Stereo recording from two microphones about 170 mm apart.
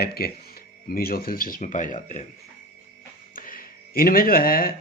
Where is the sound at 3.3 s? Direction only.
55° left (ahead or behind).